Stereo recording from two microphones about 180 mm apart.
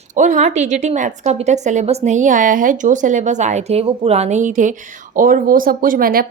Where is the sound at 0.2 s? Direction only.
40° right (ahead or behind).